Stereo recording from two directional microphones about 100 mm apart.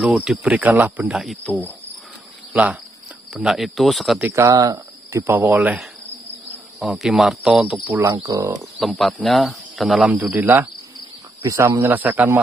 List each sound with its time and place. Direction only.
0.0 s speech: 10° right (ahead or behind)
1.0 s speech: centre (ahead or behind)
1.4 s cricket: 15° left (ahead or behind)
3.3 s speech: centre (ahead or behind)
4.2 s speech: 25° right (ahead or behind)
6.8 s speech: centre (ahead or behind)
8.0 s speech: 35° right (ahead or behind)
8.7 s speech: centre (ahead or behind)
10.3 s speech: 20° right (ahead or behind)
11.4 s speech: 35° right (ahead or behind)
11.9 s speech: 15° right (ahead or behind)